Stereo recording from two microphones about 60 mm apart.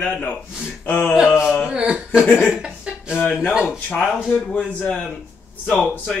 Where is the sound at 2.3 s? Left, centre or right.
Centre.